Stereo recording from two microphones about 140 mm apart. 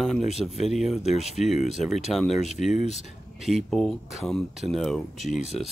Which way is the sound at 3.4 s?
Centre (ahead or behind).